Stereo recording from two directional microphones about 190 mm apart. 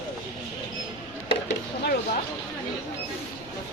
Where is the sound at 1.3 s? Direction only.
60° left (ahead or behind).